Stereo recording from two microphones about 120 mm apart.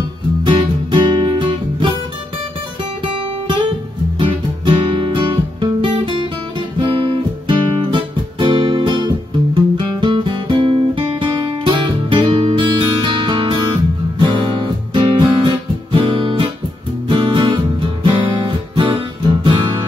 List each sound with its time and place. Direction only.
0.5 s music: 40° right (ahead or behind)
4.2 s music: 45° right (ahead or behind)
5.6 s guitar: 45° right (ahead or behind)
7.4 s guitar: 45° right (ahead or behind)
14.2 s music: 40° right (ahead or behind)